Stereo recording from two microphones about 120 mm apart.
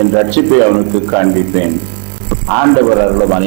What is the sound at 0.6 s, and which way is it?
Speech, 25° right (ahead or behind).